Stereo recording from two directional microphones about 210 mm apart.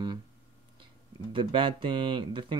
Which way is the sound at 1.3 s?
25° right (ahead or behind).